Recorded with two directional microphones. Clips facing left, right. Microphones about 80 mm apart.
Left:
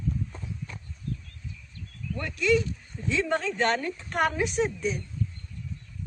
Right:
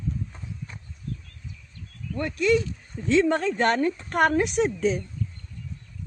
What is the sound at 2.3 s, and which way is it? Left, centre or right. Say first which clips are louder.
Speech: right 2 dB; right.